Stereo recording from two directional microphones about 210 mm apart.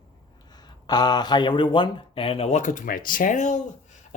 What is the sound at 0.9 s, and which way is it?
Speech, 20° left (ahead or behind).